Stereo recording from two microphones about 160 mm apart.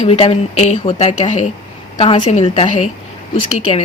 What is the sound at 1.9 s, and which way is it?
Speech, 35° left (ahead or behind).